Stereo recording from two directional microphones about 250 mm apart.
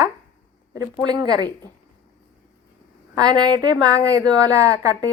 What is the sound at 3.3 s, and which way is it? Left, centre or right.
Speech, centre.